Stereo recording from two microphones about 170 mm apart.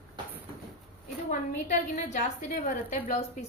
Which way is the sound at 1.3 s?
45° left (ahead or behind).